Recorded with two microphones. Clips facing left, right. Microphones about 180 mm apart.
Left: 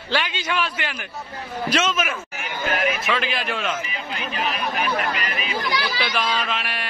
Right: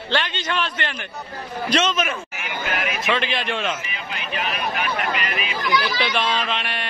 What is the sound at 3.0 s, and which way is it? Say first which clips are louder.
Speech: right 1 dB; centre (ahead or behind).